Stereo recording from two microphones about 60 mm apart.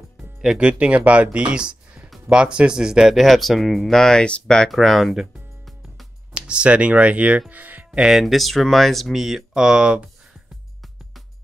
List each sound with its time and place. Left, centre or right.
0.4 s speech: centre
4.6 s music: centre
6.3 s speech: centre
8.0 s speech: centre